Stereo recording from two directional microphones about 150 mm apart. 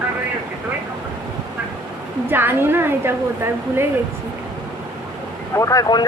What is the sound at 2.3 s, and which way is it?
Speech, 15° right (ahead or behind).